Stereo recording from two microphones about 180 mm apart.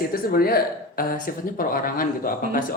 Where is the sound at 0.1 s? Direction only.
55° left (ahead or behind).